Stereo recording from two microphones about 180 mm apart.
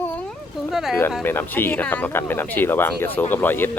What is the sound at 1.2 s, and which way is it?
Speech, 10° left (ahead or behind).